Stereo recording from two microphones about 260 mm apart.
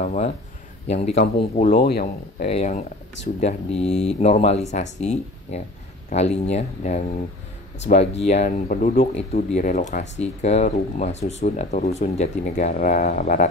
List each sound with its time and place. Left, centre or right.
0.0 s speech: left
2.4 s speech: left